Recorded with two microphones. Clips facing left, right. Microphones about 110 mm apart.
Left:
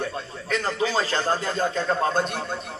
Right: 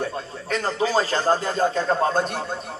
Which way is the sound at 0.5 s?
35° right (ahead or behind).